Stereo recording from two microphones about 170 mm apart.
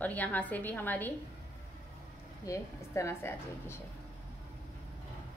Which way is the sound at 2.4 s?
20° left (ahead or behind).